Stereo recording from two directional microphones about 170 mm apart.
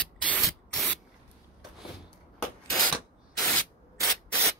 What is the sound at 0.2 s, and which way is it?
Rub, 5° left (ahead or behind).